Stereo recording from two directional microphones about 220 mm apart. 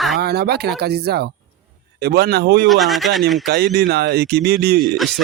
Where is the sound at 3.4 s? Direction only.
45° right (ahead or behind).